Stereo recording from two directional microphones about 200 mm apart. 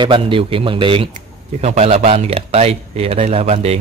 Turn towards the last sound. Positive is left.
turn(degrees=-30)  # may be behind; listen again after turning